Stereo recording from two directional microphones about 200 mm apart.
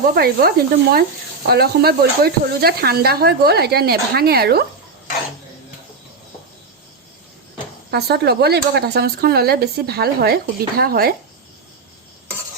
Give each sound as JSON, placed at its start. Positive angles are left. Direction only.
{"t": 0.1, "sound": "speech", "side_deg": -50}
{"t": 7.9, "sound": "speech", "side_deg": -55}